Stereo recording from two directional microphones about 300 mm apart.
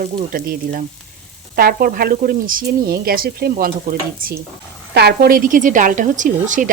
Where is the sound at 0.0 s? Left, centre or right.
Right.